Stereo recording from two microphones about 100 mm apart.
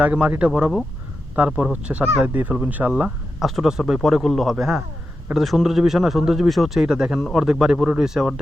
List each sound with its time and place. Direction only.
0.0 s speech: 15° right (ahead or behind)
3.4 s a man's voice: centre (ahead or behind)